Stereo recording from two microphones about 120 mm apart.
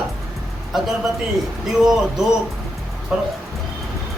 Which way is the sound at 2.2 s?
5° right (ahead or behind).